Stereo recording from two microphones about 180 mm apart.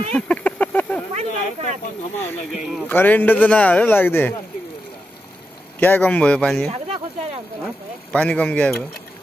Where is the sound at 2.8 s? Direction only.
10° left (ahead or behind).